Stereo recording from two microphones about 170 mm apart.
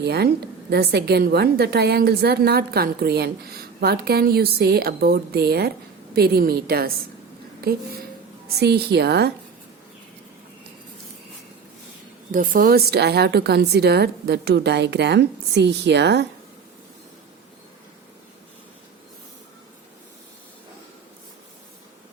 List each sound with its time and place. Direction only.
0.0 s a woman's voice: 70° right (ahead or behind)
12.3 s a woman's voice: 50° right (ahead or behind); by 16.2 s 85° right